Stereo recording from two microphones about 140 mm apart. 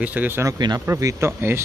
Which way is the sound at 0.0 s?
10° right (ahead or behind).